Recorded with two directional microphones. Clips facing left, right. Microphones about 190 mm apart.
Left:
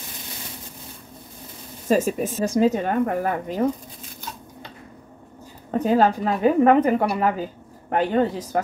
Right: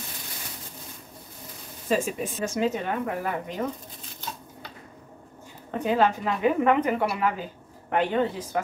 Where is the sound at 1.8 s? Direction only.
45° left (ahead or behind).